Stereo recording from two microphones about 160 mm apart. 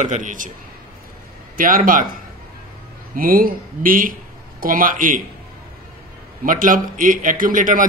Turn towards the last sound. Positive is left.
turn(degrees=-55)  # may be behind; listen again after turning